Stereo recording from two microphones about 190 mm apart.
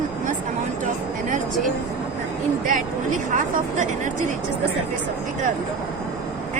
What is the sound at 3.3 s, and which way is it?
Speech, 40° right (ahead or behind).